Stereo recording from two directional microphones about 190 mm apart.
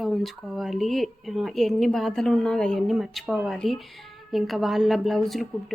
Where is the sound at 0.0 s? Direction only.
Centre (ahead or behind).